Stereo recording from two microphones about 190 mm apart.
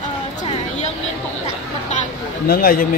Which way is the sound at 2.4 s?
50° left (ahead or behind).